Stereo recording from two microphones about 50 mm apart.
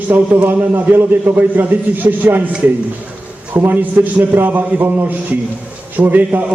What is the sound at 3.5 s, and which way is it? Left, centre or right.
A man's voice, right.